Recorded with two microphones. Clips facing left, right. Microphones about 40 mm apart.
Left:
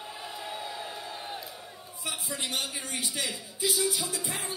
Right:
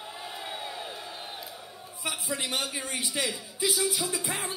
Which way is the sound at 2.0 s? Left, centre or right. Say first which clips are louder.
Right 3 dB; right.